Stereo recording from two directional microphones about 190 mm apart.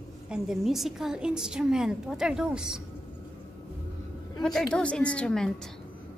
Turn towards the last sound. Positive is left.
turn(degrees=5)  # may be behind; listen again after turning